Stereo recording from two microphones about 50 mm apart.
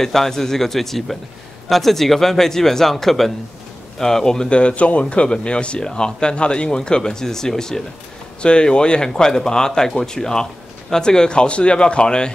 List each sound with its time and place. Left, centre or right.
0.0 s speech: centre